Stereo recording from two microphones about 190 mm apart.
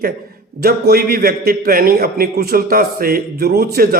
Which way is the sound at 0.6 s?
55° right (ahead or behind).